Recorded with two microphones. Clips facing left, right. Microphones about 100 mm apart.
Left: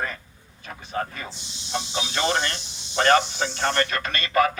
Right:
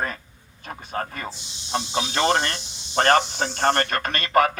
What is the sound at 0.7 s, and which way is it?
Speech, 45° right (ahead or behind).